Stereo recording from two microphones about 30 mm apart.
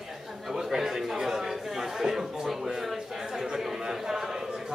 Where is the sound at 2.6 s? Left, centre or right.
Centre.